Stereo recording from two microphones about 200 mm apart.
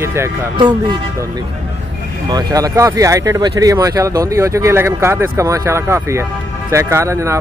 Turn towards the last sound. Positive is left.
turn(degrees=-15)  # may be behind; listen again after turning